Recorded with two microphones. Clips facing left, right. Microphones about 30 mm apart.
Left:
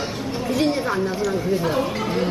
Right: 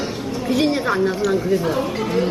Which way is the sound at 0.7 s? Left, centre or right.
Right.